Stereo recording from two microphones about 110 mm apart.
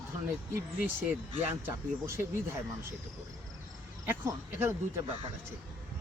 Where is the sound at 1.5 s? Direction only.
20° right (ahead or behind).